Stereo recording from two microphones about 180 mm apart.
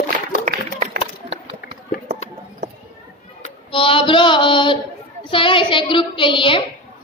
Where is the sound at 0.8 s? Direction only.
40° right (ahead or behind).